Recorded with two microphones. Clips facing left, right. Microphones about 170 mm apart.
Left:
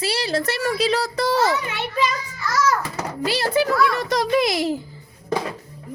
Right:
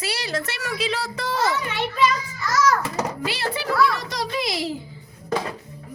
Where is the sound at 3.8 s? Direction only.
55° left (ahead or behind).